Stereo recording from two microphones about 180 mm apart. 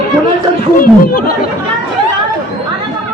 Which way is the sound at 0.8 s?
55° left (ahead or behind).